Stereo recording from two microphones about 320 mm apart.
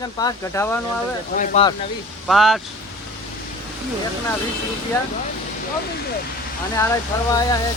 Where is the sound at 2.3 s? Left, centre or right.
Centre.